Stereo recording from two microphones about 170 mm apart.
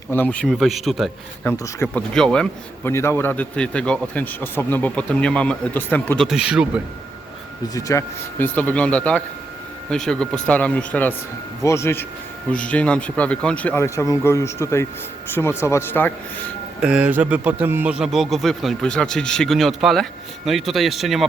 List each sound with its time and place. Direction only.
0.1 s a man's voice: 10° left (ahead or behind)
1.5 s speech: 20° left (ahead or behind)
2.0 s a man's voice: 5° left (ahead or behind)
2.9 s speech: 15° left (ahead or behind)
6.2 s a man's voice: 5° right (ahead or behind)
7.7 s speech: 20° left (ahead or behind)
8.5 s a man's voice: 10° left (ahead or behind)
16.8 s a man's voice: 5° right (ahead or behind)